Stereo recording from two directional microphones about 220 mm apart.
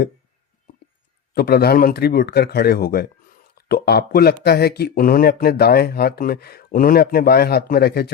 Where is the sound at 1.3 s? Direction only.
45° left (ahead or behind).